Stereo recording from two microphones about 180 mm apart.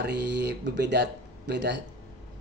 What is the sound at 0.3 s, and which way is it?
A man's voice, 75° right (ahead or behind).